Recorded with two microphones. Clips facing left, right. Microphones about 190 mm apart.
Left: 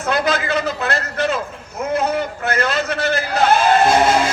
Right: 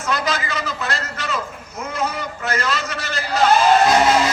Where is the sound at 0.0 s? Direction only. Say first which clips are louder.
Left 4 dB; 60° left (ahead or behind).